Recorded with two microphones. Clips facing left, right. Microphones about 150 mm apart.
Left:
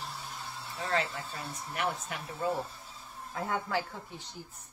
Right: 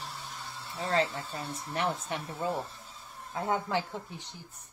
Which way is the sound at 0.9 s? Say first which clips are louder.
Right 3 dB; 30° right (ahead or behind).